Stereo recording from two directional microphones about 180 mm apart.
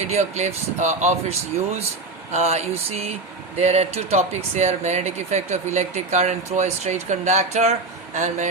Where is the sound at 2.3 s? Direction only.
35° right (ahead or behind).